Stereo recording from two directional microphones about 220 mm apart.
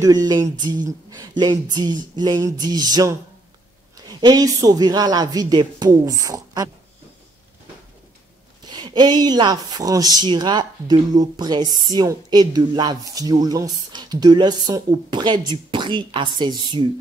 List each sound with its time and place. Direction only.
0.0 s speech: 15° right (ahead or behind)
4.2 s a woman's voice: 20° right (ahead or behind)
8.6 s speech: 20° right (ahead or behind)